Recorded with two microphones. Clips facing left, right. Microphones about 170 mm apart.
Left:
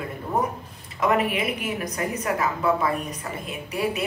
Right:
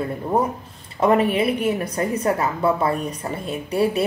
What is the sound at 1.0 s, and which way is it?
A woman's voice, 30° right (ahead or behind).